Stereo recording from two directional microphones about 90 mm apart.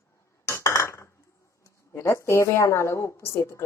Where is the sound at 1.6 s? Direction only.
30° left (ahead or behind).